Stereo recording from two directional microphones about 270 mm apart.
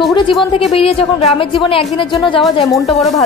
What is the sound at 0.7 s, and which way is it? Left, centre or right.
A woman's voice, left.